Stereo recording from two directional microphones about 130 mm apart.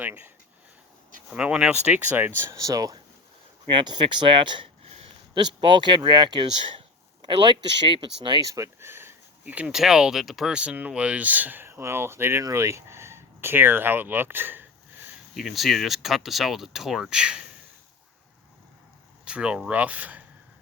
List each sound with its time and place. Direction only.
0.0 s speech: 15° right (ahead or behind)
1.3 s speech: 10° right (ahead or behind); by 8.4 s 40° right (ahead or behind)
8.4 s speech: 25° right (ahead or behind)
15.4 s speech: centre (ahead or behind)
19.2 s speech: 10° right (ahead or behind)